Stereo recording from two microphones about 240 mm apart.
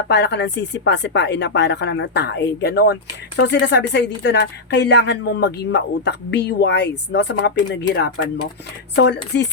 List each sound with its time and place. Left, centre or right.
0.1 s speech: left